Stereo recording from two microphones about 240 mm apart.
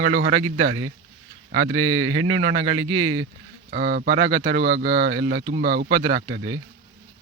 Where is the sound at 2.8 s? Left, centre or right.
Right.